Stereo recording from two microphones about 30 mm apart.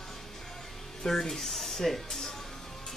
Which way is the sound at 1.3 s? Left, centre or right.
Centre.